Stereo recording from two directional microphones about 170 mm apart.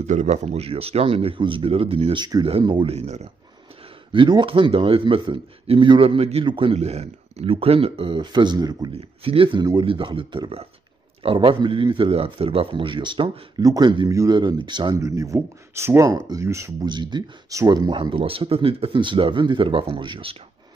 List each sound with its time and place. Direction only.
0.0 s a man's voice: 45° right (ahead or behind)
4.1 s a man's voice: 30° right (ahead or behind)